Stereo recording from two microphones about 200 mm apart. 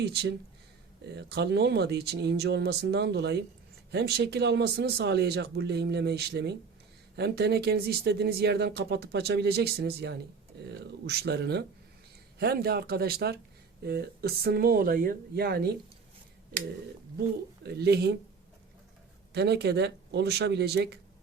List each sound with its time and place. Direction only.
0.0 s speech: 55° right (ahead or behind)
17.7 s speech: 55° right (ahead or behind)
19.3 s speech: 55° right (ahead or behind)